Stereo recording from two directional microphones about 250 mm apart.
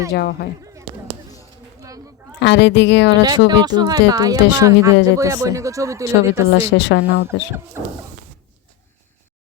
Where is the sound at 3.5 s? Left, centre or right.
Centre.